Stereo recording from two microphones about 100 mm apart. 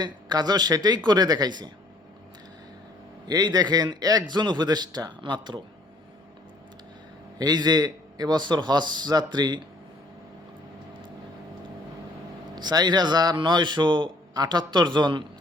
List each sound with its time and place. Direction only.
0.0 s a man's voice: 45° right (ahead or behind)
3.2 s a man's voice: 40° right (ahead or behind)
7.3 s a man's voice: 45° right (ahead or behind)
12.5 s a man's voice: 45° right (ahead or behind)